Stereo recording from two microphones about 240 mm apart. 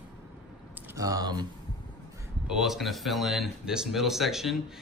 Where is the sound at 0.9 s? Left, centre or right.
Centre.